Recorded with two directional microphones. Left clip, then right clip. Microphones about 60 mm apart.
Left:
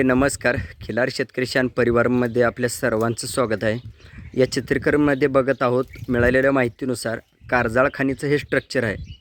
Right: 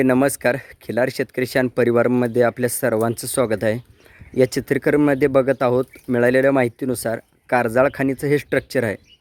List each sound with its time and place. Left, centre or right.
0.0 s speech: right